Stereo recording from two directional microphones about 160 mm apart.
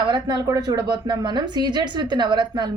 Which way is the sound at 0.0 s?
25° right (ahead or behind).